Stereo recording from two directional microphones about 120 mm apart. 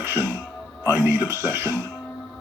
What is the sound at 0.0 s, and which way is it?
Music, 20° right (ahead or behind).